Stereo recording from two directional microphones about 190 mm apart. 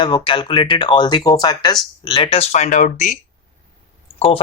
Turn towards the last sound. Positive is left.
turn(degrees=30)  # may be behind; listen again after turning